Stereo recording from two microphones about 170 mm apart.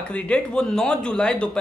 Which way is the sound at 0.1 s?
5° left (ahead or behind).